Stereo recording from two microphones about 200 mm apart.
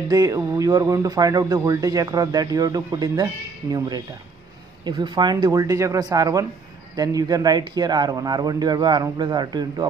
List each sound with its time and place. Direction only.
0.1 s speech: 15° right (ahead or behind)